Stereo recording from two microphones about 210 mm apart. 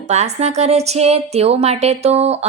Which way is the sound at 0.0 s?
30° right (ahead or behind).